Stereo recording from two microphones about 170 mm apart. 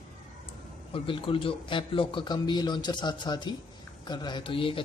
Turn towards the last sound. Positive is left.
turn(degrees=30)  # may be behind; listen again after turning